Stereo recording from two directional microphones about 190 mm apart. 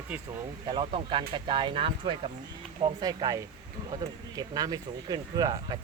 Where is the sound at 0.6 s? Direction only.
30° right (ahead or behind).